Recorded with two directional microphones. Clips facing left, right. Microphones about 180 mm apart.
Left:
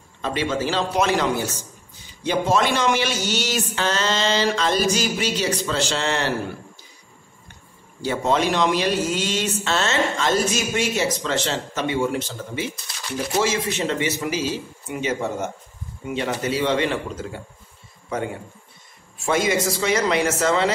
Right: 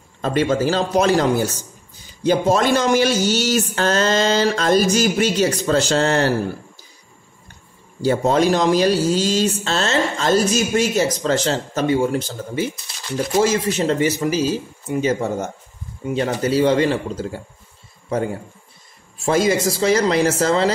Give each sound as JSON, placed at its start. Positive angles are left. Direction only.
{"t": 0.2, "sound": "speech", "side_deg": -45}
{"t": 8.0, "sound": "speech", "side_deg": -40}
{"t": 19.2, "sound": "speech", "side_deg": -35}